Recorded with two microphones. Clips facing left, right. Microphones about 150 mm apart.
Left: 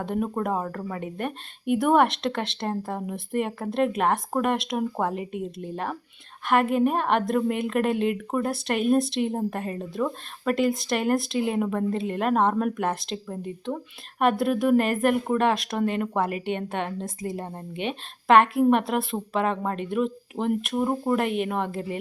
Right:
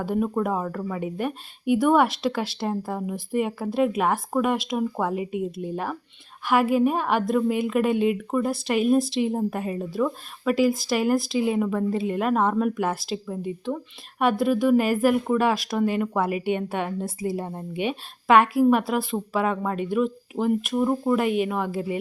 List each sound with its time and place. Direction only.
0.0 s speech: centre (ahead or behind)
14.2 s a woman's voice: centre (ahead or behind)
20.8 s speech: 15° left (ahead or behind)
21.1 s speech: 5° right (ahead or behind)